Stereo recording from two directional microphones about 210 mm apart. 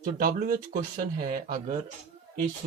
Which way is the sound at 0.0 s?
45° right (ahead or behind).